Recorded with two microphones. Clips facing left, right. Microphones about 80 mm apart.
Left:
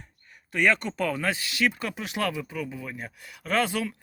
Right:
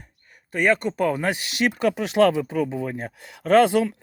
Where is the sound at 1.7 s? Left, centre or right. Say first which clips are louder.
Right 11 dB; right.